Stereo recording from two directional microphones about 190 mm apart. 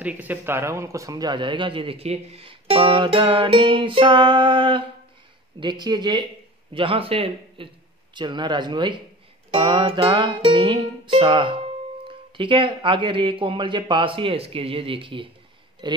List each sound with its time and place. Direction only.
0.0 s a man's voice: 10° right (ahead or behind); by 9.0 s 25° right (ahead or behind)
9.5 s music: 25° right (ahead or behind)
12.4 s a man's voice: 25° right (ahead or behind)